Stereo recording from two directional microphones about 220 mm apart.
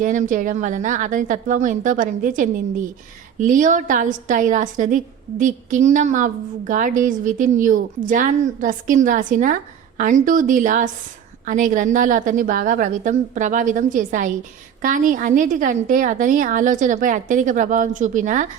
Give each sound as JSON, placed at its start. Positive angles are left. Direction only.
{"t": 0.0, "sound": "a woman's voice", "side_deg": -35}